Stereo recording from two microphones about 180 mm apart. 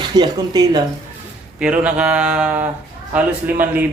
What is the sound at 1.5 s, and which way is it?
Speech, 5° right (ahead or behind).